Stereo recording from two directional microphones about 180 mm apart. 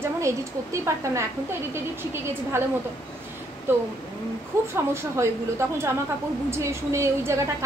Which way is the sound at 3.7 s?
10° right (ahead or behind).